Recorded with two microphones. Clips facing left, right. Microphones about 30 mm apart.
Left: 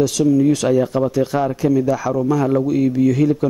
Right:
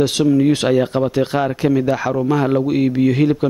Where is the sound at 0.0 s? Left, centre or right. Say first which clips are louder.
Even; right.